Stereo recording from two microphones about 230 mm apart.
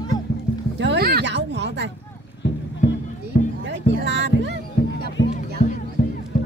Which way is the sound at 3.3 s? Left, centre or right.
Left.